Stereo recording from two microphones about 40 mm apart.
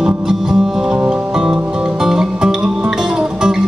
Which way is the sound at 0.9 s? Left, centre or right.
Right.